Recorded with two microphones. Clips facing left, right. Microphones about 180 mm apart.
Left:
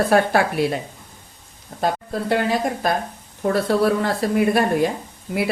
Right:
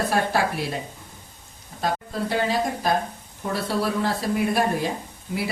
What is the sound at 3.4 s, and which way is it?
Speech, 60° left (ahead or behind).